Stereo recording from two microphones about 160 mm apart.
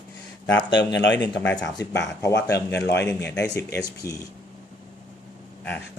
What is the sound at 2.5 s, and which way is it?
Speech, 90° left.